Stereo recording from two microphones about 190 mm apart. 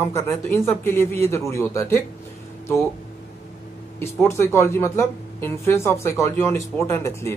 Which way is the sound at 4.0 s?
15° left (ahead or behind).